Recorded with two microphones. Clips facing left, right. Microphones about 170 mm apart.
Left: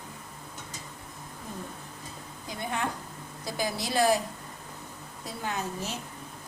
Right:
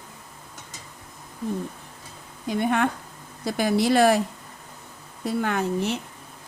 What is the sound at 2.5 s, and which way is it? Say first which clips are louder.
A woman's voice: right 10 dB; 65° right (ahead or behind).